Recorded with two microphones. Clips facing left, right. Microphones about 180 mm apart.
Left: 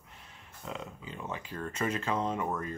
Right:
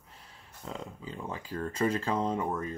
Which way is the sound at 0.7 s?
35° right (ahead or behind).